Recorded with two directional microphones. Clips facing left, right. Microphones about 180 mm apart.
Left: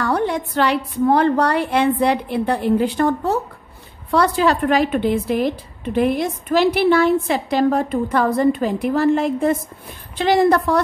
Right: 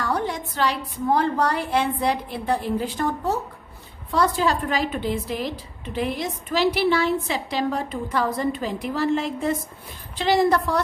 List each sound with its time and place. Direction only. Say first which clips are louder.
0.0 s a woman's voice: left 6 dB; 60° left (ahead or behind)